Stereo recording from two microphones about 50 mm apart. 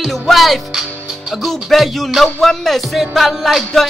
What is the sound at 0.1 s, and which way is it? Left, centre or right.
Music, centre.